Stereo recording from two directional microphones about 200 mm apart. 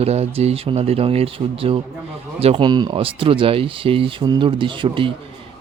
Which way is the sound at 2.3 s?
30° right (ahead or behind).